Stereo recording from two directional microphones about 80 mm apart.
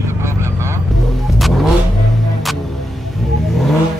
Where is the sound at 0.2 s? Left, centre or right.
Right.